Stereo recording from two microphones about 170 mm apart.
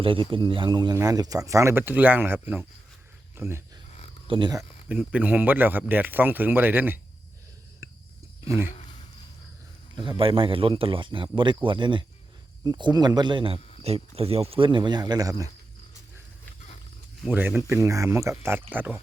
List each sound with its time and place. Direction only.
0.0 s a man's voice: 30° right (ahead or behind); by 3.6 s 15° right (ahead or behind)
4.3 s a man's voice: 25° right (ahead or behind)
4.9 s speech: 10° right (ahead or behind)
7.8 s a sound: 15° right (ahead or behind)
8.4 s speech: 15° right (ahead or behind)
9.9 s a man's voice: 30° right (ahead or behind)
17.2 s speech: 10° right (ahead or behind)